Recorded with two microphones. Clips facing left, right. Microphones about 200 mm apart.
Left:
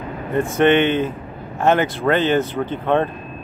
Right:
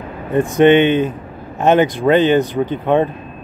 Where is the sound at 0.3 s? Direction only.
15° right (ahead or behind).